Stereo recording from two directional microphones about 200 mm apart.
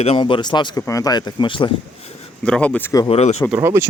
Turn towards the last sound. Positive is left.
turn(degrees=-15)  # may be behind; listen again after turning